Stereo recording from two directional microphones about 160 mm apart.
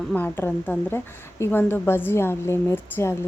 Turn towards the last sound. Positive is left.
turn(degrees=15)  # may be behind; listen again after turning